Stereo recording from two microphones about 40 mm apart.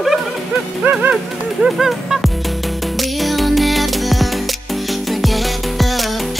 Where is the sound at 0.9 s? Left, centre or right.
Right.